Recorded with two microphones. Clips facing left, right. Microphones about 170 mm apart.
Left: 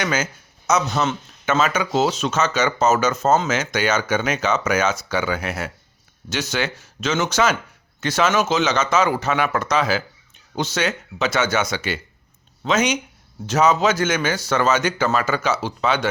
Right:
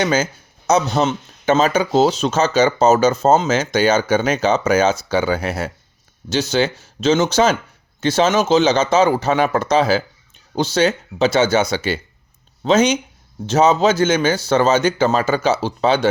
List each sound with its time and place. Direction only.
0.0 s speech: 30° right (ahead or behind)